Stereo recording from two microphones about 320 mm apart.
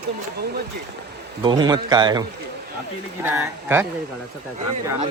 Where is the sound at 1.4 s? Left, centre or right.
Centre.